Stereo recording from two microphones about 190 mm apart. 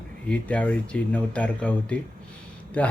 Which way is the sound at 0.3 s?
5° left (ahead or behind).